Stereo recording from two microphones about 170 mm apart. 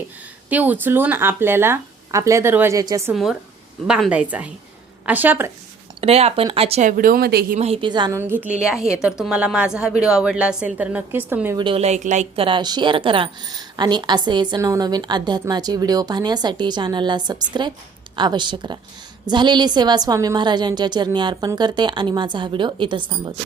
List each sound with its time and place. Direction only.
0.5 s speech: 10° right (ahead or behind)
3.1 s a woman's voice: centre (ahead or behind)
6.0 s speech: 35° right (ahead or behind)
6.9 s speech: 55° right (ahead or behind)
7.6 s a woman's voice: 35° right (ahead or behind)
8.2 s a woman's voice: 10° right (ahead or behind)
11.5 s a woman's voice: 30° right (ahead or behind)